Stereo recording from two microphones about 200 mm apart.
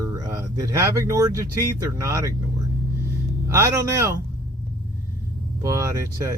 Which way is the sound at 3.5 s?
15° right (ahead or behind).